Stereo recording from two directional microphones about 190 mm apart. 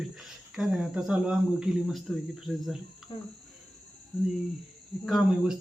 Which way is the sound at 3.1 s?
25° left (ahead or behind).